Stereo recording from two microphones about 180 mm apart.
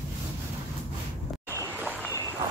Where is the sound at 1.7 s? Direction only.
5° right (ahead or behind).